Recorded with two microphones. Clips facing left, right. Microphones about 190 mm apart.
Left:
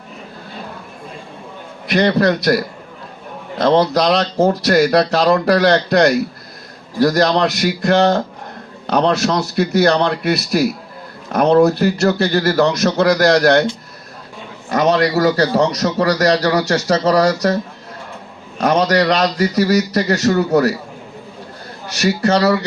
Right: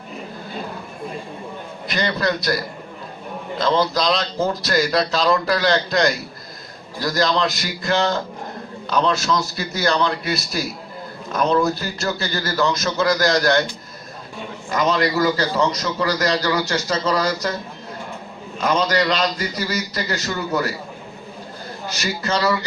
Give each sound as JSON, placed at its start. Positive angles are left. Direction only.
{"t": 1.9, "sound": "speech", "side_deg": 65}
{"t": 3.6, "sound": "speech", "side_deg": 65}
{"t": 14.7, "sound": "a man's voice", "side_deg": 70}
{"t": 18.6, "sound": "a man's voice", "side_deg": 65}
{"t": 22.0, "sound": "a man's voice", "side_deg": 70}